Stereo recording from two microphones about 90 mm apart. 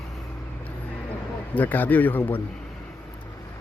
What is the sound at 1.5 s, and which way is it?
Speech, 20° left (ahead or behind).